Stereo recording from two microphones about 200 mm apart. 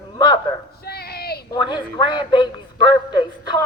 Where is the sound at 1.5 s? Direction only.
20° left (ahead or behind).